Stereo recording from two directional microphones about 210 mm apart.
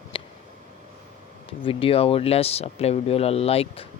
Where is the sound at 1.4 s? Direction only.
25° left (ahead or behind).